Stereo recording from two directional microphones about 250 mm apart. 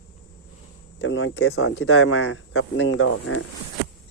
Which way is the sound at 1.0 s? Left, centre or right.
Left.